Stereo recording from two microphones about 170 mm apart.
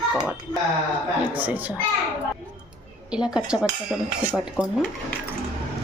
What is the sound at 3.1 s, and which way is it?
A woman's voice, 5° right (ahead or behind).